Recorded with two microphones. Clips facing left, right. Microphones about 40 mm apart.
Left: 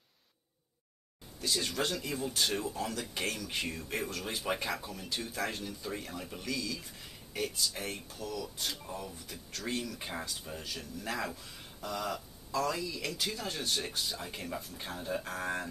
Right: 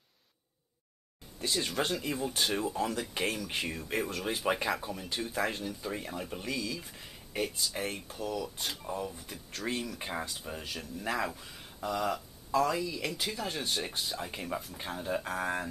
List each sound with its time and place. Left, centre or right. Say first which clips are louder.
1.5 s speech: right 1 dB; centre